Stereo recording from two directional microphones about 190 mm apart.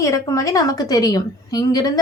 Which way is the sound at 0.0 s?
15° left (ahead or behind).